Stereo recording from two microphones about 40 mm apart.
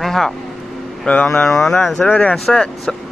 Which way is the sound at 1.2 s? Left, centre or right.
Centre.